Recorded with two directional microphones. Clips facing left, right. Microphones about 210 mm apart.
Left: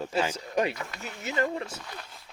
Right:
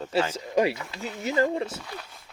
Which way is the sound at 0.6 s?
25° right (ahead or behind).